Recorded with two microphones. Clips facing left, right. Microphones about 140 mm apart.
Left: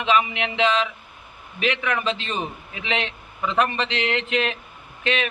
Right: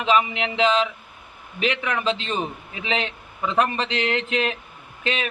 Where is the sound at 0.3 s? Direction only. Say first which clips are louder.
Right 1 dB; 30° right (ahead or behind).